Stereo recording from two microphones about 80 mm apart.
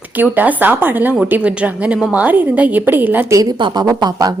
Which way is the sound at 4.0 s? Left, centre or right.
Right.